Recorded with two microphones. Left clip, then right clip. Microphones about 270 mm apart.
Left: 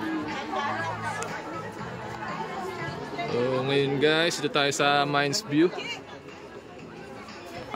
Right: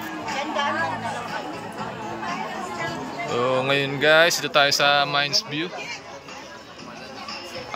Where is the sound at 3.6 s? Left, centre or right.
Centre.